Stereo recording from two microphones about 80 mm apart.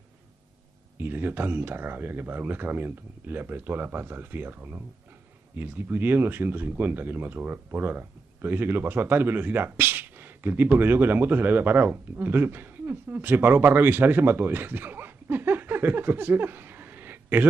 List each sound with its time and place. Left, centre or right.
0.9 s speech: right